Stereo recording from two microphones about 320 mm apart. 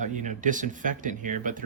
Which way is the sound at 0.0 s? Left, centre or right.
Right.